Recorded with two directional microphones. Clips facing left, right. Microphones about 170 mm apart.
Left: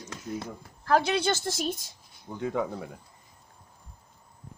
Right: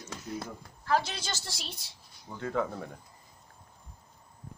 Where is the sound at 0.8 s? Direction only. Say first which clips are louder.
Left 6 dB; 55° left (ahead or behind).